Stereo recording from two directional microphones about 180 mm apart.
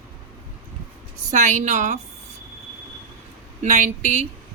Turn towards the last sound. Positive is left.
turn(degrees=-40)  # may be behind; listen again after turning